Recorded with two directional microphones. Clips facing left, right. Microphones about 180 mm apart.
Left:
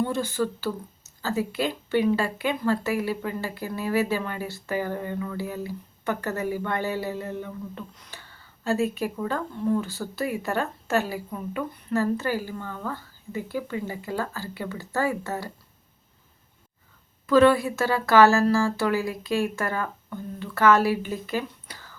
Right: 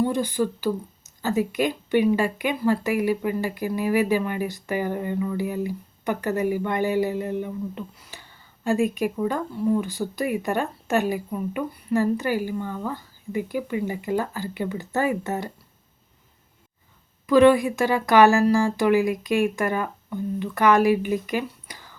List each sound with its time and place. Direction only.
0.0 s speech: 15° right (ahead or behind)
17.2 s speech: 15° right (ahead or behind)